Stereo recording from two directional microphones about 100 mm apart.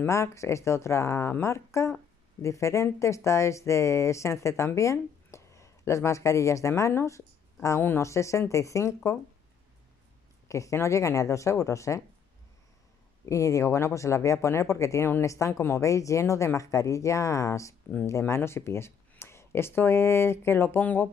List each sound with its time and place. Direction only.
0.0 s speech: 30° left (ahead or behind)
10.5 s speech: 30° left (ahead or behind)
13.2 s speech: 30° left (ahead or behind)